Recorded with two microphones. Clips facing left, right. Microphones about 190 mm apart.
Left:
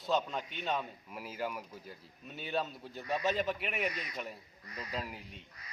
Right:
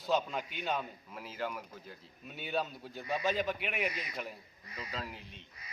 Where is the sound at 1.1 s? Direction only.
10° left (ahead or behind).